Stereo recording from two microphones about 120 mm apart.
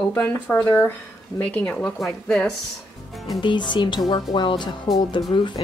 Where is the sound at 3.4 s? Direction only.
40° left (ahead or behind).